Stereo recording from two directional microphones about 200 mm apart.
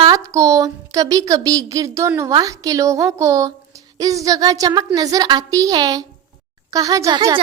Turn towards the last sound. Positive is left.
turn(degrees=-15)  # may be behind; listen again after turning